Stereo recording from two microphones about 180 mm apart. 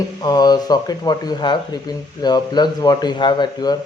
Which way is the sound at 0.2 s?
20° left (ahead or behind).